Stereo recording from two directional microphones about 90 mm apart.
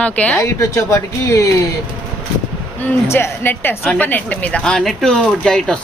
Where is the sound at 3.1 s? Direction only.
25° left (ahead or behind); by 5.8 s 10° left (ahead or behind).